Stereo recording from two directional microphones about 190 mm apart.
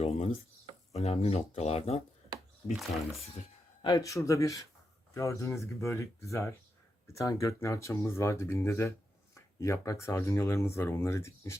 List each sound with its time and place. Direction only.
0.9 s speech: 35° left (ahead or behind)
2.7 s speech: centre (ahead or behind)
3.8 s speech: 15° left (ahead or behind)